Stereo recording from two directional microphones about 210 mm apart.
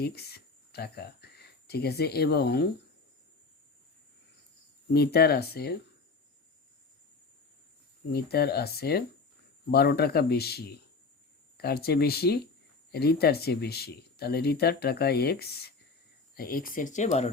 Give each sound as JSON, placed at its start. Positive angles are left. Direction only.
{"t": 0.0, "sound": "speech", "side_deg": 50}
{"t": 4.9, "sound": "speech", "side_deg": 50}
{"t": 8.1, "sound": "speech", "side_deg": 50}